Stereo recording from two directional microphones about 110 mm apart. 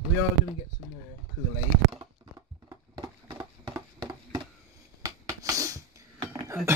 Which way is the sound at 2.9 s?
30° right (ahead or behind).